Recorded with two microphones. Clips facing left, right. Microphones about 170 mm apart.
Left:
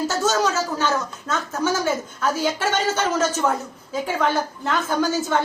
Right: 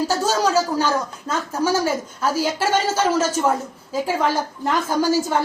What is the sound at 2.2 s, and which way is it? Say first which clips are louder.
Speech: right 1 dB; 10° right (ahead or behind).